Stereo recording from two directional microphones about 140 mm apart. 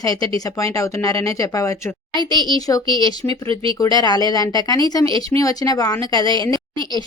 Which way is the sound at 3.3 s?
40° right (ahead or behind).